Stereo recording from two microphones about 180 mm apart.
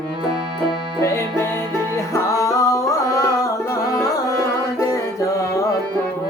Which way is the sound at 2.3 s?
20° left (ahead or behind).